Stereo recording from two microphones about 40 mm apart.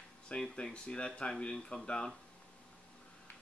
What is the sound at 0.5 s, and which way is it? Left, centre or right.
Speech, left.